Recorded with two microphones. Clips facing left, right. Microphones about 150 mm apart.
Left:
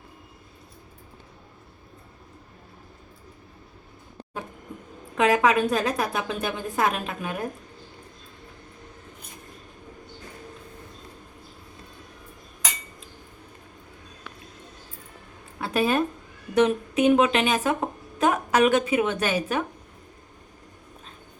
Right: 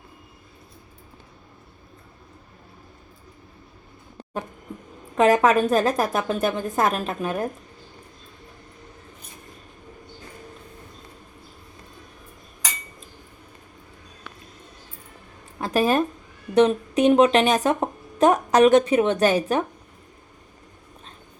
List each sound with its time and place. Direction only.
5.1 s a woman's voice: 45° right (ahead or behind)
15.6 s a sound: 40° right (ahead or behind)
16.6 s a woman's voice: 35° right (ahead or behind)